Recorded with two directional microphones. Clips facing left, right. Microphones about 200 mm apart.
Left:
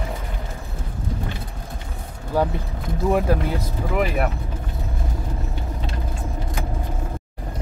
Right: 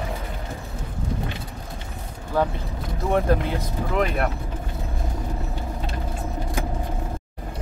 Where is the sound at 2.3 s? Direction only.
10° left (ahead or behind).